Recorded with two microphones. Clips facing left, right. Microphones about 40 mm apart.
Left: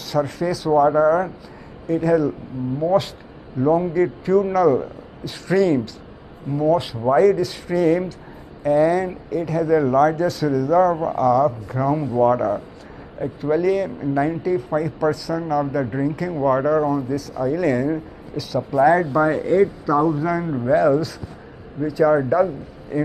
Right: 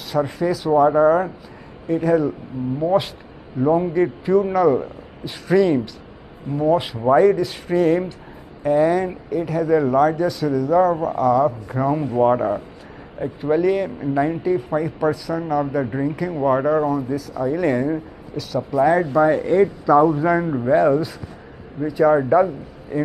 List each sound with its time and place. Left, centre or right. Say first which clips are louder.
0.1 s speech: right 1 dB; centre
3.5 s speech: even; centre
19.4 s speech: right 1 dB; centre
20.4 s speech: left 3 dB; centre